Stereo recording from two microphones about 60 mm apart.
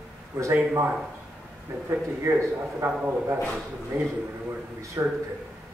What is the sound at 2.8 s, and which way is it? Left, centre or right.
Speech, right.